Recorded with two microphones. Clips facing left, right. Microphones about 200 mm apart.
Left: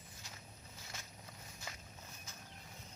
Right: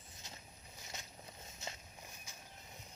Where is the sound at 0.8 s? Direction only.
20° right (ahead or behind).